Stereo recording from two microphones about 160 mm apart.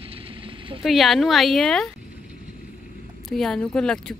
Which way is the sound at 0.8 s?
Centre (ahead or behind).